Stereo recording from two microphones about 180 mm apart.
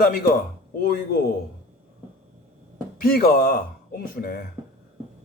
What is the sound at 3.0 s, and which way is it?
Speech, 55° left (ahead or behind).